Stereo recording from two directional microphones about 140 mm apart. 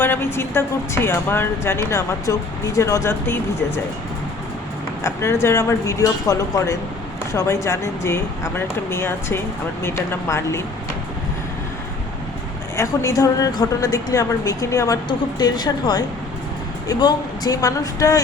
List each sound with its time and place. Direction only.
0.0 s speech: 15° left (ahead or behind)
5.0 s a woman's voice: 20° left (ahead or behind)
12.7 s a woman's voice: 20° left (ahead or behind)